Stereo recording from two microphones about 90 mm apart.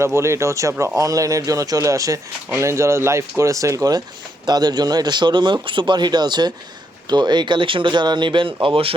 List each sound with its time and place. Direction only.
0.0 s speech: 30° right (ahead or behind)
4.4 s a man's voice: 50° right (ahead or behind); by 8.5 s 65° right (ahead or behind)
8.6 s speech: 90° right